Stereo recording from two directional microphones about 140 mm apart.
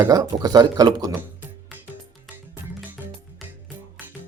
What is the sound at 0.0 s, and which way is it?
Speech, 25° right (ahead or behind).